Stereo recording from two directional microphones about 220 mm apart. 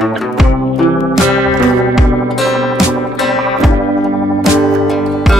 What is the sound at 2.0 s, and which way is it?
Music, centre (ahead or behind).